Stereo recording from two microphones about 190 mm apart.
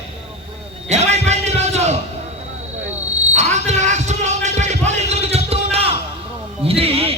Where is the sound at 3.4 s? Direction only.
35° right (ahead or behind).